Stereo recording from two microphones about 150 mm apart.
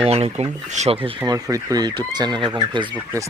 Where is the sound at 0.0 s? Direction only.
45° right (ahead or behind).